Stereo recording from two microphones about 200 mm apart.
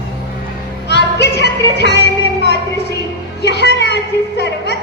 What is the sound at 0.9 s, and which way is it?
Music, 60° left (ahead or behind).